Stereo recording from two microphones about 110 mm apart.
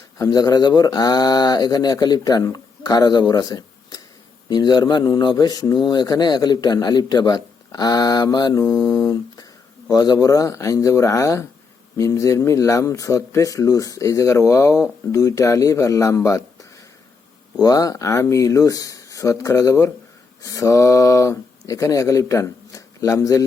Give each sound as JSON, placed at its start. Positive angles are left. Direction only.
{"t": 0.2, "sound": "a man's voice", "side_deg": 35}
{"t": 17.6, "sound": "a man's voice", "side_deg": 35}